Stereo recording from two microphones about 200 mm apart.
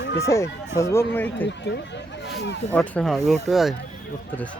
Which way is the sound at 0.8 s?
15° left (ahead or behind).